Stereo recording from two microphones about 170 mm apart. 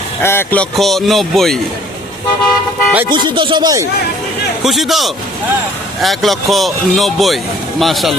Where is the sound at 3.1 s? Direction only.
25° right (ahead or behind).